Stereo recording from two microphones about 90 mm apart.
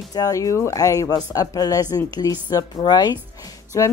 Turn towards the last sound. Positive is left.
turn(degrees=40)  # may be behind; listen again after turning